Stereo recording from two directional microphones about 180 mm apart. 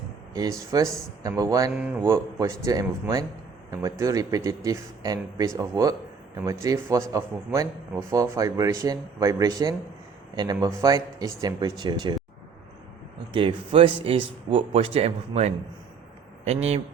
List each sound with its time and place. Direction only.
0.7 s a man's voice: 20° right (ahead or behind)
1.7 s a man's voice: 10° right (ahead or behind); by 12.1 s 25° right (ahead or behind)
13.3 s speech: 30° right (ahead or behind)